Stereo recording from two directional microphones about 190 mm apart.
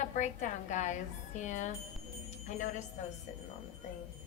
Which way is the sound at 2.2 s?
40° left (ahead or behind).